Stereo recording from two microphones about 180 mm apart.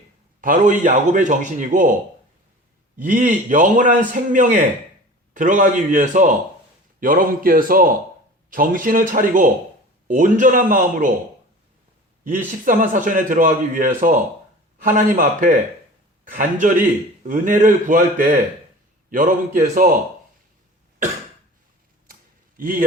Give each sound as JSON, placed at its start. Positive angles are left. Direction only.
{"t": 0.4, "sound": "a man's voice", "side_deg": -45}
{"t": 3.0, "sound": "a man's voice", "side_deg": -45}
{"t": 12.2, "sound": "a man's voice", "side_deg": -45}
{"t": 22.0, "sound": "a sound", "side_deg": -50}